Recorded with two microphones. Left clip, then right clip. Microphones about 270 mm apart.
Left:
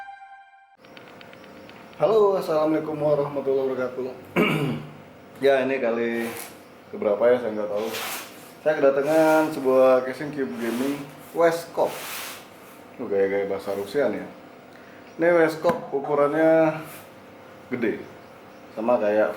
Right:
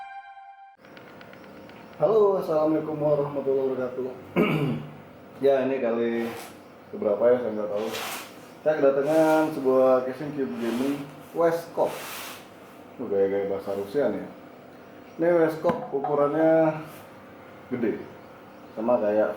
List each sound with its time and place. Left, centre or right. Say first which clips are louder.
2.0 s speech: left 1 dB; right
2.3 s speech: left 1 dB; centre
13.0 s speech: left 1 dB; centre
15.2 s speech: left 3 dB; centre